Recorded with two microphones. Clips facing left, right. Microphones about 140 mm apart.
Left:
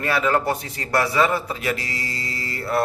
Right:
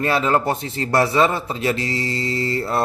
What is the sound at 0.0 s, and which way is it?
A man's voice, 25° right (ahead or behind).